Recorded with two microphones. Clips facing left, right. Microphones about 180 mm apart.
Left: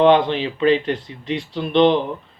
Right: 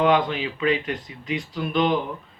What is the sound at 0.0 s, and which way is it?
Speech, 30° left (ahead or behind).